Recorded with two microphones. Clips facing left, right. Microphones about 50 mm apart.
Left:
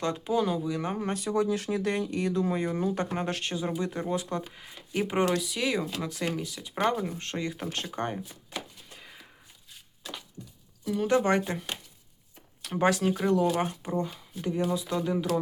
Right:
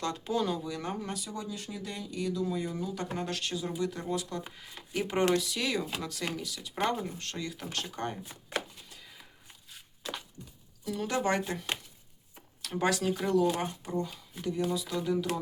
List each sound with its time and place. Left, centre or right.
0.0 s speech: centre
1.0 s speech: left
1.3 s speech: left; by 8.2 s centre
8.9 s walk: left
10.9 s speech: centre
12.8 s speech: left